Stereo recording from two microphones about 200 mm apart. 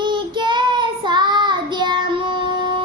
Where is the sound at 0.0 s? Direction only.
25° right (ahead or behind).